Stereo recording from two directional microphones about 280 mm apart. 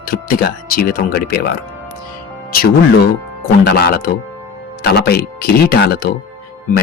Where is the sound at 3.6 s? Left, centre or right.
Left.